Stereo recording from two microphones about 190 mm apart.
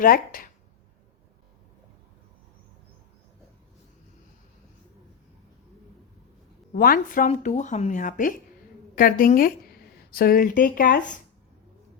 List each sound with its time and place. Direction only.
0.0 s speech: 50° left (ahead or behind)
6.7 s speech: 50° left (ahead or behind)